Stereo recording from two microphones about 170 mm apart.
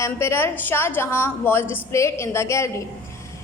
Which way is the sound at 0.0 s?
15° left (ahead or behind).